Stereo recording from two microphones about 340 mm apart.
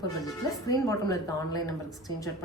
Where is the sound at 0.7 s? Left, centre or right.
Centre.